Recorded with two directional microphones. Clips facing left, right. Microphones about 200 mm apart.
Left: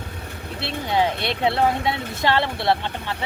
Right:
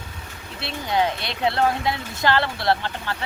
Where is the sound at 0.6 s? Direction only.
25° left (ahead or behind).